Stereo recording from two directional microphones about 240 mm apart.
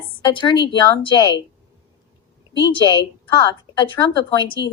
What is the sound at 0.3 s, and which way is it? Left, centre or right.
A woman's voice, centre.